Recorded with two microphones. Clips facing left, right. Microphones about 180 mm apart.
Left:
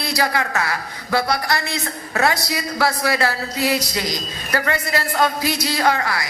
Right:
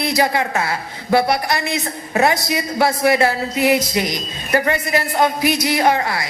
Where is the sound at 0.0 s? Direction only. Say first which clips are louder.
Right 4 dB; 20° right (ahead or behind).